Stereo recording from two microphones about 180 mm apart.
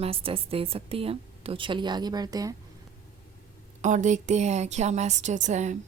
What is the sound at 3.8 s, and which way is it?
Speech, 45° right (ahead or behind).